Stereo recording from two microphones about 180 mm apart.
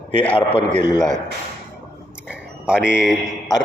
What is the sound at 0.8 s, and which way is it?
Speech, 25° left (ahead or behind).